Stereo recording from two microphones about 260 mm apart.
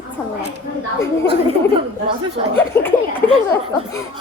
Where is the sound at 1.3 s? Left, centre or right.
Right.